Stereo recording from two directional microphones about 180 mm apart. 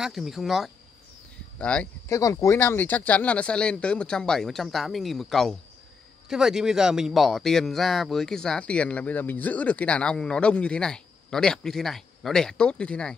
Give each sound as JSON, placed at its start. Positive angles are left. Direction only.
{"t": 0.0, "sound": "speech", "side_deg": 0}
{"t": 2.1, "sound": "speech", "side_deg": 20}